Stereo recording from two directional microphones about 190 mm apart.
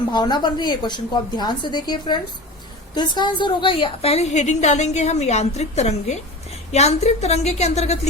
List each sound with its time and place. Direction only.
0.1 s a woman's voice: 25° left (ahead or behind)